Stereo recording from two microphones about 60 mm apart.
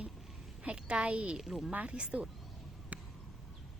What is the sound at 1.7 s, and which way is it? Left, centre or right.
Speech, centre.